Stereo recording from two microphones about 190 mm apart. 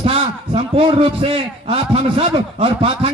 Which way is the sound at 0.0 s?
30° right (ahead or behind).